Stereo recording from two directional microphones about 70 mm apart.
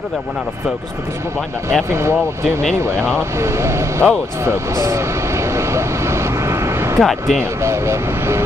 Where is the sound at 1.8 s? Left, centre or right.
Right.